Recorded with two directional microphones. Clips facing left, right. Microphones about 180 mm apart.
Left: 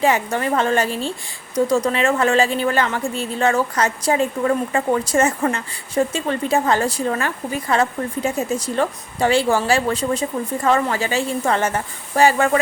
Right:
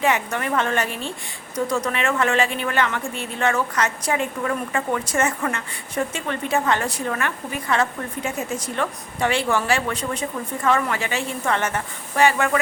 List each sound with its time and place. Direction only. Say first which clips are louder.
0.0 s a woman's voice: left 4 dB; 30° left (ahead or behind)